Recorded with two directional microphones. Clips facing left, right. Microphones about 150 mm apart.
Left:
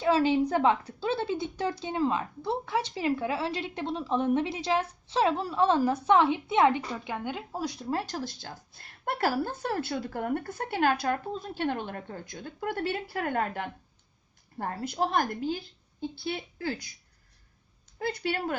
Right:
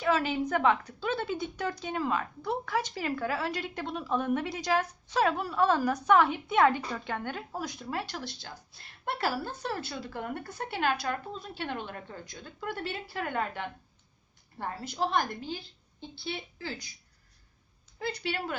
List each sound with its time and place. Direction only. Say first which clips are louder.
0.0 s a woman's voice: left 4 dB; 30° left (ahead or behind)
7.6 s a woman's voice: left 6 dB; 30° left (ahead or behind); by 16.9 s 55° left (ahead or behind)
18.0 s speech: left 3 dB; 50° left (ahead or behind)